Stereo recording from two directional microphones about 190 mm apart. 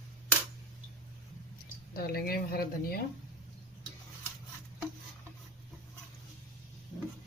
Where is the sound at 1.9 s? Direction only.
50° left (ahead or behind).